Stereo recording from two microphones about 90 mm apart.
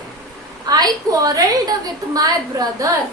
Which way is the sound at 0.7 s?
45° right (ahead or behind).